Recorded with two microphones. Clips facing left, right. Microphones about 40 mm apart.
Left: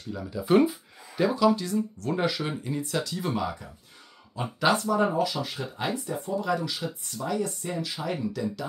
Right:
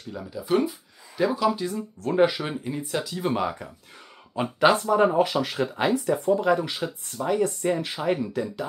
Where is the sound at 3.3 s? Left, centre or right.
Right.